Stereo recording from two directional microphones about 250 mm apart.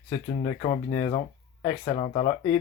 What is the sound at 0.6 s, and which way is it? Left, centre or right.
Speech, left.